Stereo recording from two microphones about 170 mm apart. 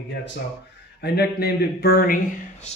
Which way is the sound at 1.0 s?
70° left (ahead or behind).